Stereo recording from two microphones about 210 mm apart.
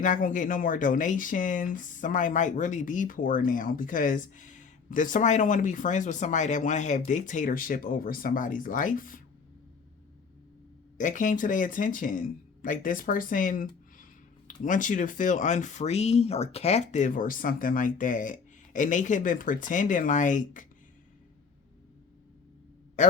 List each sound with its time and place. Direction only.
0.0 s speech: 40° left (ahead or behind)
10.9 s speech: 35° left (ahead or behind)